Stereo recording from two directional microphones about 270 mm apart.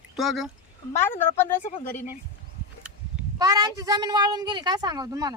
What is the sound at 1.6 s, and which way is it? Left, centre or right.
Speech, left.